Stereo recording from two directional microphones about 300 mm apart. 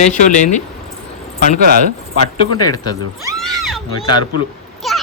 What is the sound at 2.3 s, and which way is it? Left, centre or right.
Speech, centre.